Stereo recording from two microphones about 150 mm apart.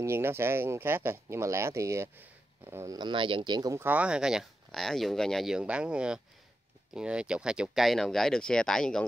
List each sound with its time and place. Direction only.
0.0 s speech: 15° right (ahead or behind)
3.0 s speech: 35° right (ahead or behind)
3.8 s speech: 10° right (ahead or behind)